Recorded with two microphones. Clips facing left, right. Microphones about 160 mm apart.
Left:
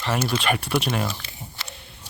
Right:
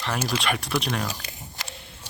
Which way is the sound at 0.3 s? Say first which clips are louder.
Left 3 dB; centre (ahead or behind).